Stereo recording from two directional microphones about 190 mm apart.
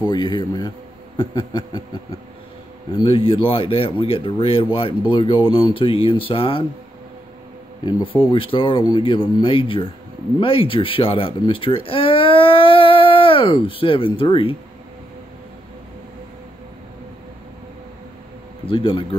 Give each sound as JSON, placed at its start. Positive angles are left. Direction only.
{"t": 0.0, "sound": "speech", "side_deg": 20}
{"t": 2.9, "sound": "speech", "side_deg": 30}
{"t": 7.8, "sound": "speech", "side_deg": 30}
{"t": 18.7, "sound": "speech", "side_deg": 25}